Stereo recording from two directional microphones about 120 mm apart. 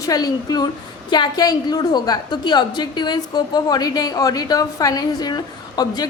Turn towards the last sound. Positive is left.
turn(degrees=35)  # may be behind; listen again after turning